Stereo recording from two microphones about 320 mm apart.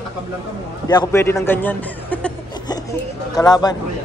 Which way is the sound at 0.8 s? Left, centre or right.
Centre.